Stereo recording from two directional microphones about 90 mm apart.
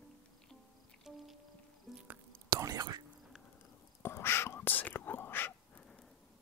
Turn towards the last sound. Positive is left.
turn(degrees=10)  # may be behind; listen again after turning